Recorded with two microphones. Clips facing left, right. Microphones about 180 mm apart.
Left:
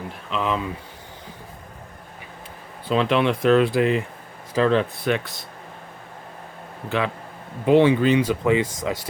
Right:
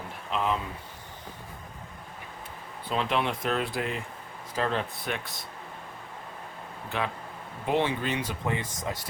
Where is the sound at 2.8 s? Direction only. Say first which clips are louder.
Left 8 dB; 90° left.